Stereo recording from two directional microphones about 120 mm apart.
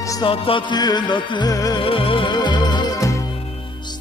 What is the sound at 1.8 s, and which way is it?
Music, 50° left (ahead or behind).